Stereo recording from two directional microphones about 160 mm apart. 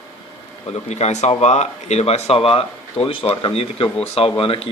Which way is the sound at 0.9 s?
45° left (ahead or behind).